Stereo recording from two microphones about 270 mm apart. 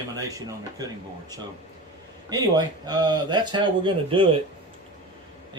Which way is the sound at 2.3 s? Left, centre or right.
Centre.